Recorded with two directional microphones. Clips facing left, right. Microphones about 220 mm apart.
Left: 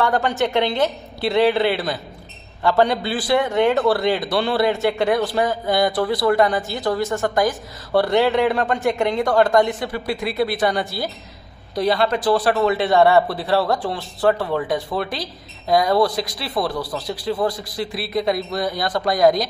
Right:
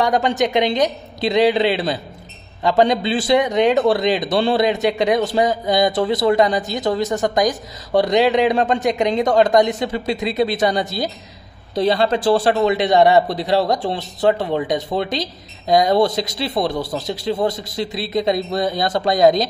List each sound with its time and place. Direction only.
0.0 s a man's voice: 15° right (ahead or behind)